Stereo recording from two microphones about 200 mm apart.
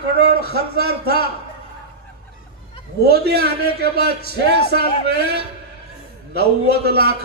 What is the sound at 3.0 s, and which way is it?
A man's voice, 55° right (ahead or behind).